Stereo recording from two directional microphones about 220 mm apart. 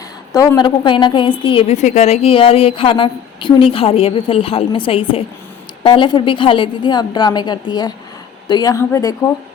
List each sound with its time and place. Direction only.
0.3 s a woman's voice: 15° left (ahead or behind)